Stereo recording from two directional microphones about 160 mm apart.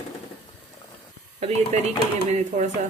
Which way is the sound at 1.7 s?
45° right (ahead or behind).